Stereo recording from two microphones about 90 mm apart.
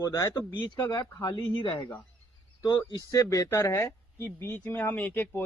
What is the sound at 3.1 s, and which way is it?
Speech, 40° left (ahead or behind).